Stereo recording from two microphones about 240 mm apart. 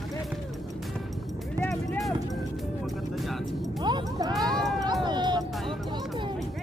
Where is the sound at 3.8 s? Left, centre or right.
Centre.